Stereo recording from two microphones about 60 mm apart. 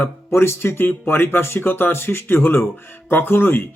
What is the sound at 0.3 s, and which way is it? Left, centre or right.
Speech, left.